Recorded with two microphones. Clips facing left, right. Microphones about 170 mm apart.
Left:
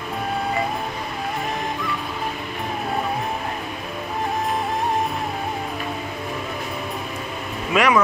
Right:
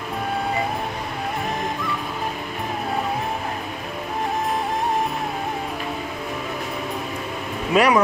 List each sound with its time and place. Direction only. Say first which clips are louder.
7.7 s speech: right 1 dB; 35° right (ahead or behind)